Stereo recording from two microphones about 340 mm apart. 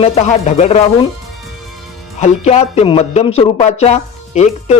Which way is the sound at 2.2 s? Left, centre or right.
Centre.